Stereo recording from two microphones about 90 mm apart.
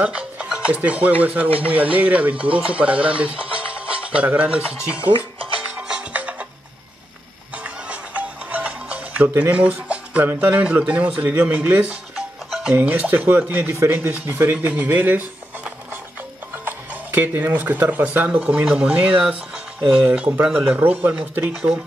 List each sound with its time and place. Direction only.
0.0 s a man's voice: 15° right (ahead or behind)
3.5 s music: 15° right (ahead or behind)
7.5 s music: 15° right (ahead or behind)
10.6 s a man's voice: 15° right (ahead or behind)
12.4 s music: 5° right (ahead or behind)
12.7 s a man's voice: 15° right (ahead or behind)